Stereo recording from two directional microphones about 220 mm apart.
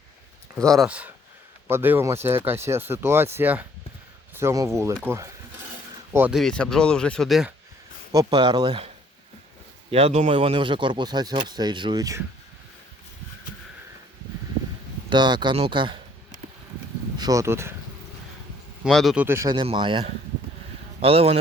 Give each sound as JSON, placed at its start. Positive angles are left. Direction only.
{"t": 0.5, "sound": "speech", "side_deg": 0}
{"t": 5.0, "sound": "a sound", "side_deg": -10}
{"t": 6.1, "sound": "speech", "side_deg": -5}
{"t": 8.1, "sound": "speech", "side_deg": -20}
{"t": 9.9, "sound": "speech", "side_deg": -30}
{"t": 15.1, "sound": "speech", "side_deg": -20}
{"t": 17.2, "sound": "speech", "side_deg": -15}
{"t": 18.8, "sound": "speech", "side_deg": 0}